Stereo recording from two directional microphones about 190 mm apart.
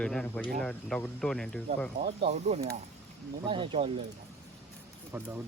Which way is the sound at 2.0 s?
35° right (ahead or behind).